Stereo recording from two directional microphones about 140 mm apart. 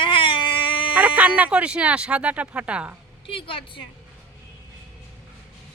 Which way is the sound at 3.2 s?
40° left (ahead or behind).